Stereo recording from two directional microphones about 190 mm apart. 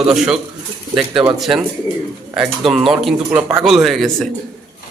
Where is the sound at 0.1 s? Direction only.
Centre (ahead or behind).